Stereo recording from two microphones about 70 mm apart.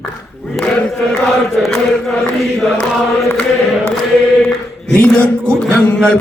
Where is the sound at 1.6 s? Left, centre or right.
Centre.